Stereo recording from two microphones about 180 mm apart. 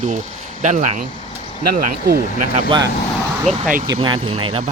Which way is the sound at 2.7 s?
20° right (ahead or behind).